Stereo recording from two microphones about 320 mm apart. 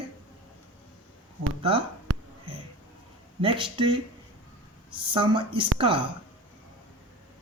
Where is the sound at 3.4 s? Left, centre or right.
Centre.